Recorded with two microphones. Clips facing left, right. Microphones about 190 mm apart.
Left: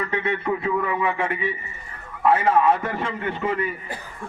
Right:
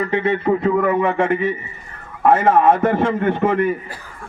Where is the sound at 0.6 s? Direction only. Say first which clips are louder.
Right 7 dB; 45° right (ahead or behind).